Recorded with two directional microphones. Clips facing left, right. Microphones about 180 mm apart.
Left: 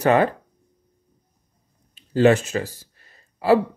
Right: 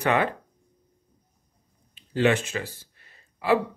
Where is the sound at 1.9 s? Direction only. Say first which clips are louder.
Left 6 dB; 40° left (ahead or behind).